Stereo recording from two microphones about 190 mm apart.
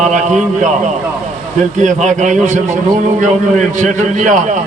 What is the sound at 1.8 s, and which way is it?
Speech, 40° right (ahead or behind).